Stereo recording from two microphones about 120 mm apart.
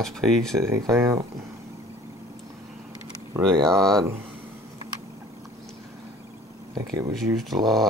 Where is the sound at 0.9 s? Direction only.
25° right (ahead or behind).